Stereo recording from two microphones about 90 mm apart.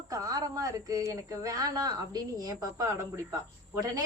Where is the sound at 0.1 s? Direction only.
40° right (ahead or behind).